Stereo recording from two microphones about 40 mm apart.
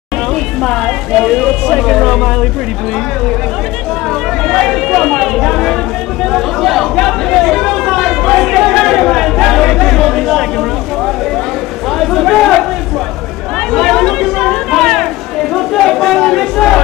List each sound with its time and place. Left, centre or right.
1.2 s speech: centre
4.5 s speech: centre
6.3 s chatter: centre
12.0 s a sound: centre
13.7 s a sound: centre
15.5 s crowd: centre